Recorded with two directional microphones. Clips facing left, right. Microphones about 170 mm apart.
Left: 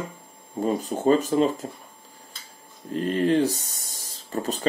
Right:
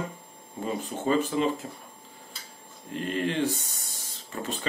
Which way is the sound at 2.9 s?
40° left (ahead or behind).